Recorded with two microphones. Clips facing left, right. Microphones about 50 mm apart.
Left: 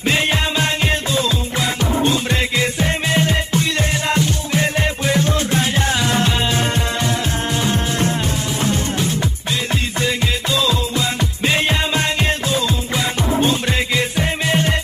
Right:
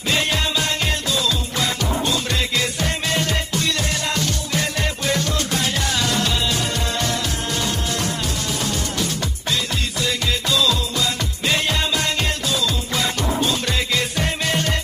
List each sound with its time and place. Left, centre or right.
0.1 s music: left
2.5 s music: left
10.0 s music: left
13.9 s music: centre